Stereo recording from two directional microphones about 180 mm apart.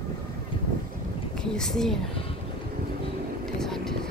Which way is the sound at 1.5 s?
5° left (ahead or behind).